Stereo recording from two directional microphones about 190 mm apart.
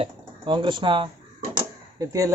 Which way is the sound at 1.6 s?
20° right (ahead or behind).